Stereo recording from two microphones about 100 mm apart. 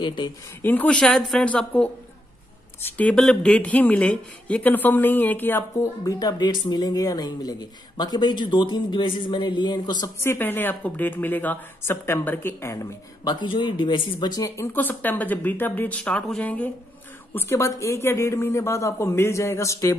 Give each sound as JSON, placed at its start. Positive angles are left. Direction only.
{"t": 0.0, "sound": "speech", "side_deg": 50}
{"t": 0.6, "sound": "speech", "side_deg": 20}
{"t": 6.0, "sound": "speech", "side_deg": 40}
{"t": 10.2, "sound": "speech", "side_deg": 20}
{"t": 13.2, "sound": "speech", "side_deg": 45}
{"t": 14.7, "sound": "speech", "side_deg": 20}